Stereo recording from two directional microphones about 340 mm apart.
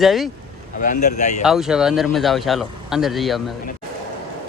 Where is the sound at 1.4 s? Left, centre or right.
Centre.